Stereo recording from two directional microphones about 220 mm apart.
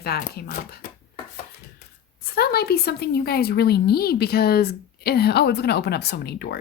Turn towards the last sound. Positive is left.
turn(degrees=50)  # may be behind; listen again after turning